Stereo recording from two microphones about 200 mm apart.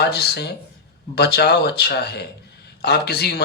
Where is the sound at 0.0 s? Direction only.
55° left (ahead or behind).